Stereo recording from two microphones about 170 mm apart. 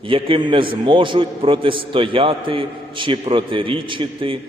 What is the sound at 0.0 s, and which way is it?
A man's voice, 30° right (ahead or behind).